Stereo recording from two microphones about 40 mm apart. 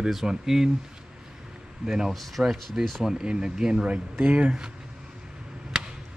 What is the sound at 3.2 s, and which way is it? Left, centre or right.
Speech, right.